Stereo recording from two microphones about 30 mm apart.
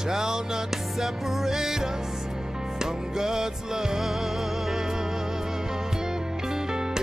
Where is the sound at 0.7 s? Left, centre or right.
Centre.